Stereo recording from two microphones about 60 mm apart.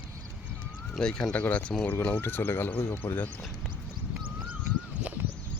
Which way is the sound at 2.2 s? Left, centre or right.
Left.